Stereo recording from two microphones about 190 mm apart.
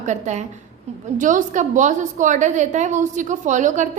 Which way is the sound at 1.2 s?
40° right (ahead or behind).